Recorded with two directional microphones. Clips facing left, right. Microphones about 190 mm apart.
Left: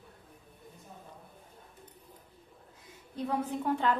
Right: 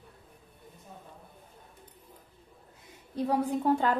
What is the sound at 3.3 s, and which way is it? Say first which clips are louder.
Speech: right 5 dB; 40° right (ahead or behind).